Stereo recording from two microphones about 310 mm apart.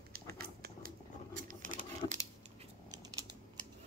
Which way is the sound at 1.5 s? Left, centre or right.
Right.